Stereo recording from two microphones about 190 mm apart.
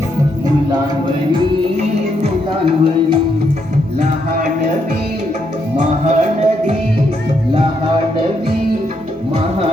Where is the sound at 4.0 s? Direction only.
40° right (ahead or behind).